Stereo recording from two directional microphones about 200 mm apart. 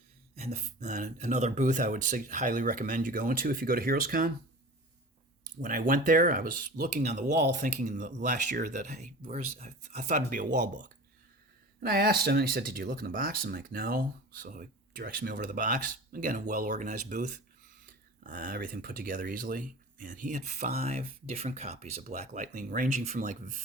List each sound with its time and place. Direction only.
0.5 s speech: 40° right (ahead or behind)
5.4 s speech: 45° right (ahead or behind)
10.5 s speech: 55° right (ahead or behind); by 23.6 s 40° right (ahead or behind)